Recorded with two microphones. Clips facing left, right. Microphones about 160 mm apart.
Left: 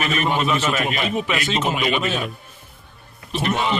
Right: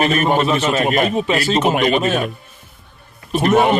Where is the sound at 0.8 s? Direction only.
45° right (ahead or behind).